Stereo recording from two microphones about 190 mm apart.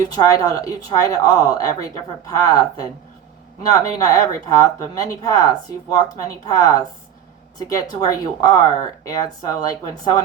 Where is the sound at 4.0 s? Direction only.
20° left (ahead or behind).